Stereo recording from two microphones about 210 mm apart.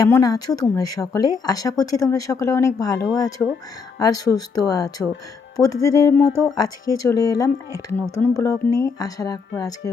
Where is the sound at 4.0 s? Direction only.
15° left (ahead or behind).